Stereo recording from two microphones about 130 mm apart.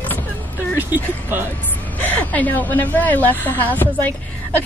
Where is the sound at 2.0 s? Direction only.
10° left (ahead or behind).